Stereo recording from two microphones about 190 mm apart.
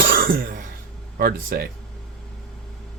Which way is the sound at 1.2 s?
50° right (ahead or behind).